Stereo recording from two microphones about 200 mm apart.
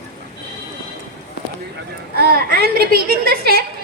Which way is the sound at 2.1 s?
50° right (ahead or behind).